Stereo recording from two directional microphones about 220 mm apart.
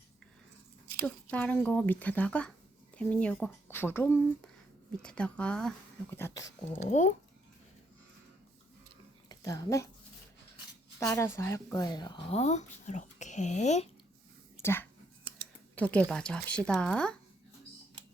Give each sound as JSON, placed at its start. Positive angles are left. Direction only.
{"t": 1.0, "sound": "speech", "side_deg": 5}
{"t": 6.7, "sound": "speech", "side_deg": 30}
{"t": 9.3, "sound": "speech", "side_deg": 15}
{"t": 11.0, "sound": "speech", "side_deg": 15}
{"t": 14.6, "sound": "speech", "side_deg": 10}